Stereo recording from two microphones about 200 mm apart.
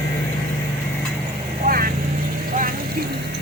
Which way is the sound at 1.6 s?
40° right (ahead or behind).